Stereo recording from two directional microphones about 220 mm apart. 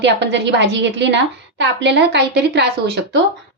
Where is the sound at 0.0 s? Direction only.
55° right (ahead or behind).